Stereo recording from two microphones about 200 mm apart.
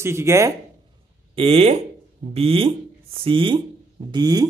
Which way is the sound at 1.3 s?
30° right (ahead or behind).